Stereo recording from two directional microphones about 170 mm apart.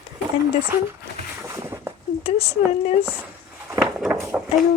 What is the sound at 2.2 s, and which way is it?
Speech, 35° left (ahead or behind).